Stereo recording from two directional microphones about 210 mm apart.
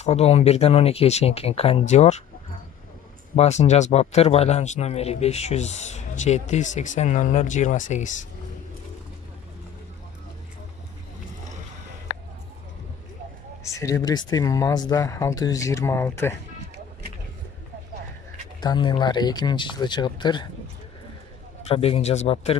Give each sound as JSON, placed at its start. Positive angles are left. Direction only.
{"t": 0.0, "sound": "speech", "side_deg": 30}
{"t": 3.3, "sound": "a man's voice", "side_deg": 30}
{"t": 13.7, "sound": "speech", "side_deg": 15}
{"t": 18.6, "sound": "speech", "side_deg": 20}
{"t": 21.6, "sound": "speech", "side_deg": 30}